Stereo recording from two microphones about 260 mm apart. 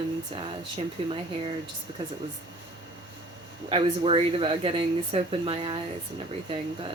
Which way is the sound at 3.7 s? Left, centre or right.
Right.